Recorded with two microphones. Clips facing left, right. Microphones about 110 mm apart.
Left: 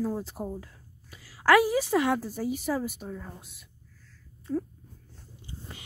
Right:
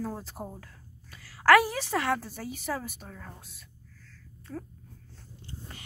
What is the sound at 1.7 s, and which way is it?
A woman's voice, 15° left (ahead or behind).